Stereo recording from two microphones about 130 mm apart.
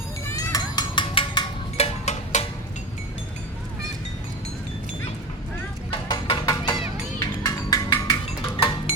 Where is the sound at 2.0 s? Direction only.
60° left (ahead or behind).